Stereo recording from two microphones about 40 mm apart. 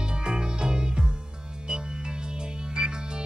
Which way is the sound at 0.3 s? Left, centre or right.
Right.